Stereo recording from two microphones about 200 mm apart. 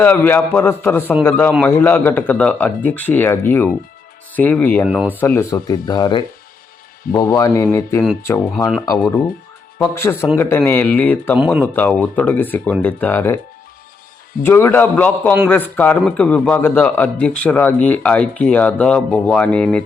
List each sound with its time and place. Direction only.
0.0 s a man's voice: 10° left (ahead or behind)
4.9 s speech: 5° right (ahead or behind)
5.2 s a man's voice: 10° left (ahead or behind)
11.3 s speech: 5° right (ahead or behind)
11.6 s a man's voice: 10° left (ahead or behind)
14.4 s a man's voice: 10° left (ahead or behind)